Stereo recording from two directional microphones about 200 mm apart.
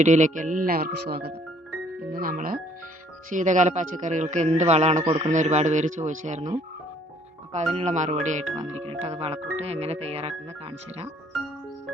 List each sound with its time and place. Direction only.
0.0 s speech: 35° right (ahead or behind)
7.5 s speech: 35° right (ahead or behind)